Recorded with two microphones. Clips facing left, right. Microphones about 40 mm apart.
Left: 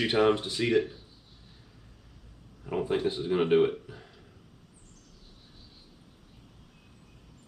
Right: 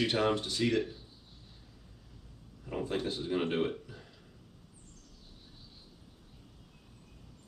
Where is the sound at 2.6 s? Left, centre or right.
Left.